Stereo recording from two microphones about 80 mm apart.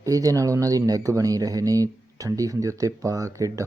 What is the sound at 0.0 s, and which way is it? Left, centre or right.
Speech, right.